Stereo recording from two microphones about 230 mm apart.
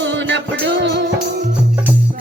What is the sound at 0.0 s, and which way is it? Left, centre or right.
Music, right.